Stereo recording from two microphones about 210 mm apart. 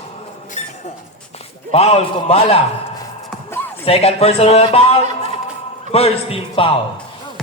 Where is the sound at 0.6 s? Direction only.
30° left (ahead or behind).